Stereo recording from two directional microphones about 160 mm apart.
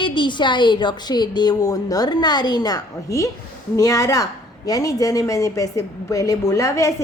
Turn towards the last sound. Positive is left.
turn(degrees=20)  # may be behind; listen again after turning